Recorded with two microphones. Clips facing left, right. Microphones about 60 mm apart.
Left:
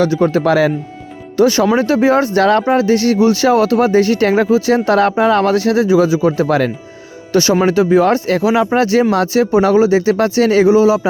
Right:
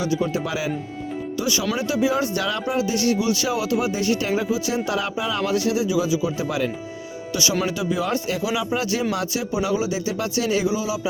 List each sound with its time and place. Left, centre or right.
0.0 s a man's voice: left
7.5 s a man's voice: left